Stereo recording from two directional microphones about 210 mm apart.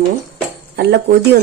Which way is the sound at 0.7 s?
50° right (ahead or behind).